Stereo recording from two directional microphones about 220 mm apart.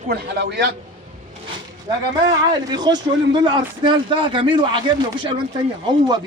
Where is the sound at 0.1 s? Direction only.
50° right (ahead or behind).